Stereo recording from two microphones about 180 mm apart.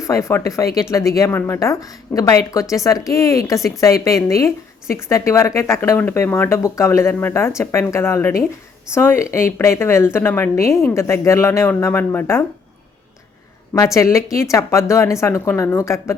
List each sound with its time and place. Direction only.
0.0 s a woman's voice: 15° left (ahead or behind)
13.7 s a woman's voice: 15° left (ahead or behind)